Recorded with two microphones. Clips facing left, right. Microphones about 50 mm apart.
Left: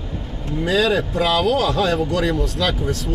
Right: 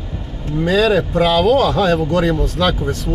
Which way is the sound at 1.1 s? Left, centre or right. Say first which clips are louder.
Right 6 dB; right.